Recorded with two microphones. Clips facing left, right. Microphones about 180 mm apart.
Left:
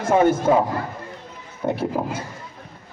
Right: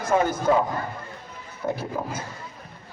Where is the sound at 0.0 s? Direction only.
25° left (ahead or behind).